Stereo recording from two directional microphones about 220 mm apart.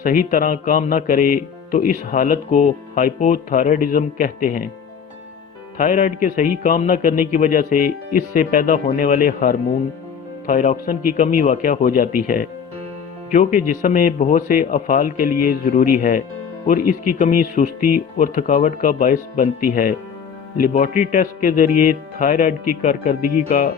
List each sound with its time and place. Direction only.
0.0 s speech: 40° left (ahead or behind)
5.7 s speech: 35° left (ahead or behind)
13.3 s speech: 35° left (ahead or behind)